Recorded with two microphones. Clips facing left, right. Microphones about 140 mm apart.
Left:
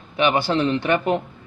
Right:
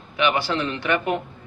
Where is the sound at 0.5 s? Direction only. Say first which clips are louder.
Left 4 dB; 30° left (ahead or behind).